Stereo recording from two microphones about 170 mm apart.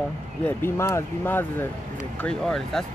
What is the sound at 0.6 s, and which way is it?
Speech, 15° left (ahead or behind).